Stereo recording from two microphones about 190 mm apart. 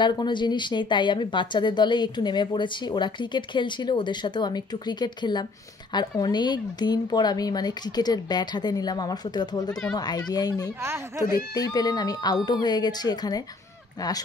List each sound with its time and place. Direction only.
0.0 s a woman's voice: 25° left (ahead or behind)
10.8 s speech: 15° right (ahead or behind)
11.5 s a woman's voice: 20° left (ahead or behind)